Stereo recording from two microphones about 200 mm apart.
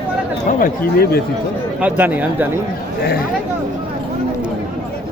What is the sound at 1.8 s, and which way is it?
Speech, 10° right (ahead or behind).